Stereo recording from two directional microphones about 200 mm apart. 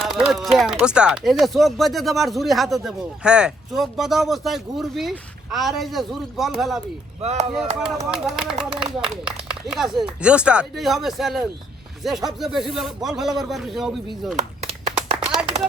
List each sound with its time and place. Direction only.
0.0 s speech: centre (ahead or behind)
7.2 s speech: 35° right (ahead or behind)
8.1 s speech: 5° right (ahead or behind)
14.3 s a sound: 35° right (ahead or behind)
14.9 s clapping: 5° right (ahead or behind)